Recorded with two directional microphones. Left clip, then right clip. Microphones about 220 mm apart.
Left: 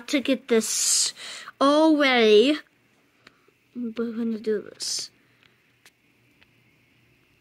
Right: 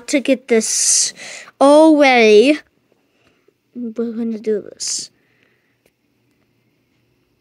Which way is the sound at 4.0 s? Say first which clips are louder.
Right 7 dB; 20° right (ahead or behind).